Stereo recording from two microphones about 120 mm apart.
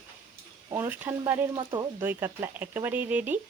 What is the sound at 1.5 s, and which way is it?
Speech, 40° right (ahead or behind).